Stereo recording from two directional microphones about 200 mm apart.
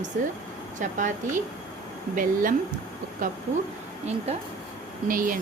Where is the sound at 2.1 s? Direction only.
45° right (ahead or behind).